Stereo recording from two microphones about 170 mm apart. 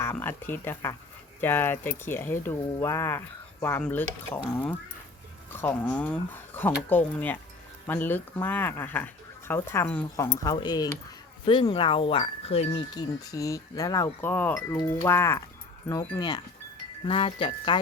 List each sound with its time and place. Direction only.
0.0 s speech: 15° left (ahead or behind); by 12.8 s 35° left (ahead or behind)
12.9 s speech: 20° left (ahead or behind)
14.2 s speech: 10° left (ahead or behind); by 17.7 s 30° left (ahead or behind)